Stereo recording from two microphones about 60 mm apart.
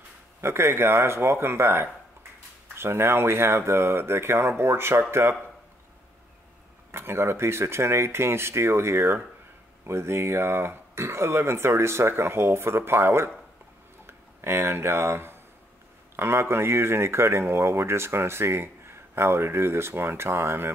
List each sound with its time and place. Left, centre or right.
0.4 s speech: right
6.9 s speech: right